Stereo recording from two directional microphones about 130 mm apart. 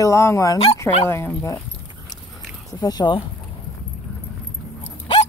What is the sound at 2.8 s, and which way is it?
Speech, 35° left (ahead or behind).